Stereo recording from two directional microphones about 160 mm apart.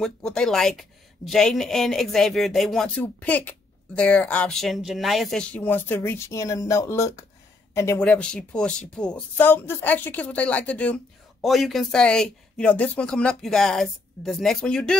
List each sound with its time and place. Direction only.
0.0 s a woman's voice: 5° left (ahead or behind)
8.0 s speech: 5° left (ahead or behind)